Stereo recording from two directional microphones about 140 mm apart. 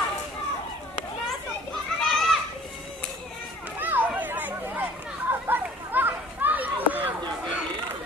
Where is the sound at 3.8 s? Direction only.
15° right (ahead or behind).